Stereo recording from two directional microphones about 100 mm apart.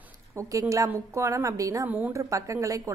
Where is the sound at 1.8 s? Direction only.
15° right (ahead or behind).